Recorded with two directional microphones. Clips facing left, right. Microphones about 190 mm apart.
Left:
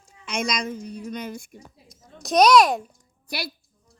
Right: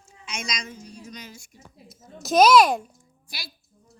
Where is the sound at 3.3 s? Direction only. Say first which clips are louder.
Left 12 dB; 65° left (ahead or behind).